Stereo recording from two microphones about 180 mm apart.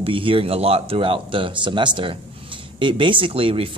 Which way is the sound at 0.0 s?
30° right (ahead or behind).